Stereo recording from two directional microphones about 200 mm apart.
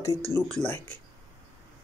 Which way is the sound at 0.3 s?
10° left (ahead or behind).